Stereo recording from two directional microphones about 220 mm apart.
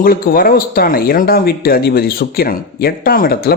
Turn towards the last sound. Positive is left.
turn(degrees=45)  # may be behind; listen again after turning